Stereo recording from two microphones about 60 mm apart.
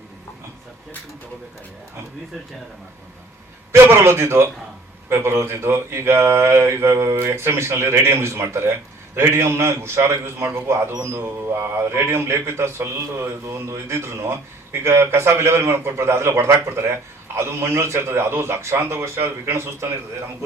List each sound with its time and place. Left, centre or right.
3.7 s a man's voice: right